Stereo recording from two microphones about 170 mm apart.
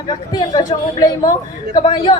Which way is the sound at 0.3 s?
25° left (ahead or behind).